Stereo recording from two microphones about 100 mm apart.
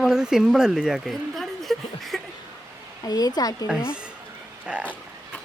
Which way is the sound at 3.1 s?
40° left (ahead or behind).